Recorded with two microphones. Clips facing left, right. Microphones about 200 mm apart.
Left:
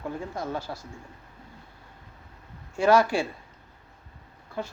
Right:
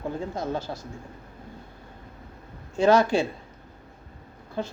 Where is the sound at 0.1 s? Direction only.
20° right (ahead or behind).